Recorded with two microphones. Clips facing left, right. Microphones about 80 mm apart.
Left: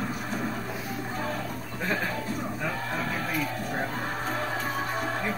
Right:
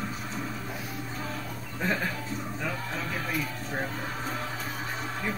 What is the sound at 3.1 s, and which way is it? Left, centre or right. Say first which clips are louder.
Music: left 2 dB; left.